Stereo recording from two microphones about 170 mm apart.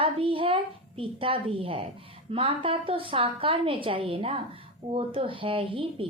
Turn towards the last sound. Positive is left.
turn(degrees=-30)  # may be behind; listen again after turning